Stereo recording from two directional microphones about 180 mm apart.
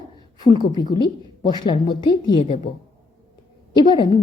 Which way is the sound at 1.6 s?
25° left (ahead or behind).